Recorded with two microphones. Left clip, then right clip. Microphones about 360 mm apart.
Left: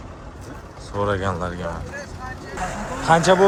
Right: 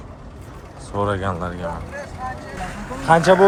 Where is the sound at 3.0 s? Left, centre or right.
Centre.